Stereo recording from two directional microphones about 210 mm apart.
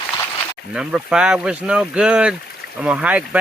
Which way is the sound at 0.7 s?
5° right (ahead or behind).